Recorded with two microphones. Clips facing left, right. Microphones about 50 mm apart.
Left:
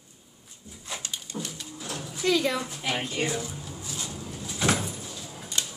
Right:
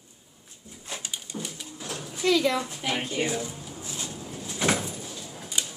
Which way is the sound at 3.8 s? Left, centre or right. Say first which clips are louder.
Right 1 dB; right.